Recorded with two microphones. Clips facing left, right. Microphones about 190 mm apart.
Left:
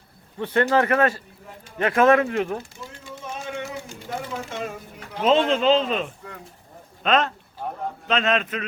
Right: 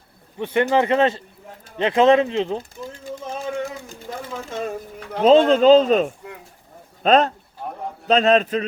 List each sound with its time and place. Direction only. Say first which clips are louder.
0.3 s speech: right 1 dB; 15° right (ahead or behind)
2.8 s a sound: right 5 dB; 40° right (ahead or behind)
4.4 s speech: right 4 dB; 35° right (ahead or behind)